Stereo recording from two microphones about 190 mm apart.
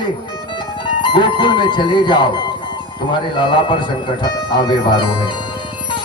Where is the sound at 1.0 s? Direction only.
25° left (ahead or behind).